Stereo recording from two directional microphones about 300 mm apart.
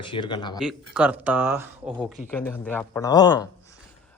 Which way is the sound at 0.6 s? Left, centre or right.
Centre.